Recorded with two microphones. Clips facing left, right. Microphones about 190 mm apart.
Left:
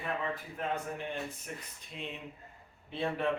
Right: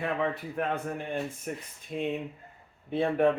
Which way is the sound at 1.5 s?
50° right (ahead or behind).